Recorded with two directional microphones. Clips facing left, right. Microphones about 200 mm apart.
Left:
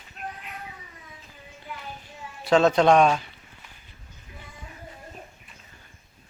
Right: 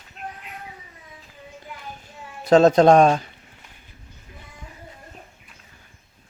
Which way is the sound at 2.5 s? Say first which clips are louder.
Right 5 dB; 40° right (ahead or behind).